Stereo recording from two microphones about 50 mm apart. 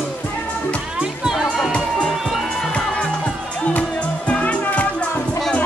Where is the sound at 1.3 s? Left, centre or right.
Centre.